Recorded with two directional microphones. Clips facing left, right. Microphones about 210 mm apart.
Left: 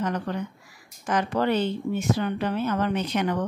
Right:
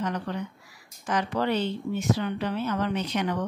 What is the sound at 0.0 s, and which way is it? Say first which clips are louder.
A woman's voice: left 2 dB; 50° left (ahead or behind).